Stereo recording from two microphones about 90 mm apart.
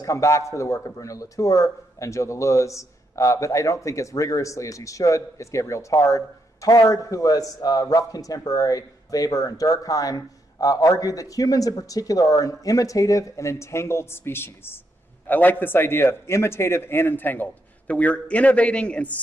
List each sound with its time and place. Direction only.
0.0 s speech: 35° left (ahead or behind); by 19.1 s 15° left (ahead or behind)